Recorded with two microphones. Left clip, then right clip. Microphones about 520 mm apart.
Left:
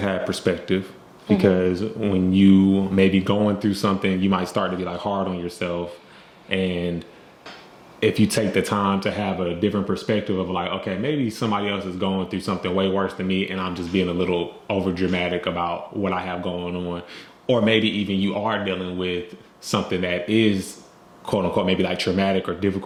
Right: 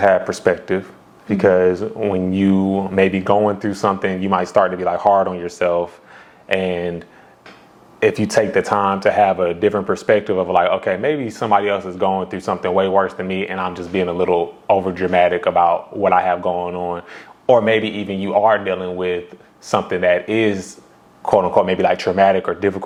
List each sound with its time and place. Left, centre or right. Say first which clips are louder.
0.0 s speech: right 9 dB; right
8.0 s speech: right 5 dB; right